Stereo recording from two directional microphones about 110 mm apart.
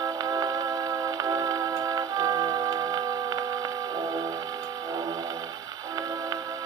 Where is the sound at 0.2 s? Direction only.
30° right (ahead or behind).